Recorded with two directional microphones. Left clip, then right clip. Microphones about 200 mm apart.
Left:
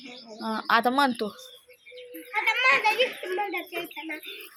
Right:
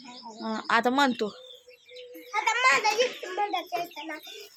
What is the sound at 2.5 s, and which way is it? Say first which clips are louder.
Children playing: left 1 dB; 25° right (ahead or behind).